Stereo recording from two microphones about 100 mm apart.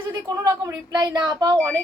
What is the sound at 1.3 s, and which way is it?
Speech, 45° right (ahead or behind).